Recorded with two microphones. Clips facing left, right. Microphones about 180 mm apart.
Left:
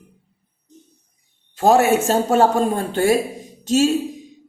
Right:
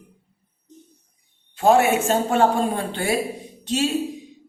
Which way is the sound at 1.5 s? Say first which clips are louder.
Left 2 dB; 40° left (ahead or behind).